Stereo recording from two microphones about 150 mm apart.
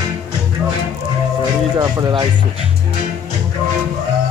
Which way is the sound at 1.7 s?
25° right (ahead or behind).